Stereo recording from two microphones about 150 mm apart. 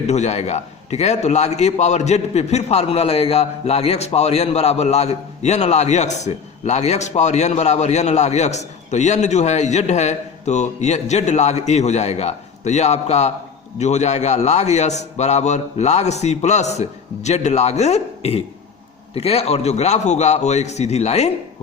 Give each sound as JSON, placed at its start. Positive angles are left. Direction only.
{"t": 0.1, "sound": "a man's voice", "side_deg": 50}